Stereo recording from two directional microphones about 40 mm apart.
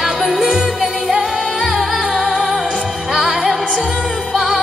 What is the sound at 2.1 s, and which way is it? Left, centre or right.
Music, centre.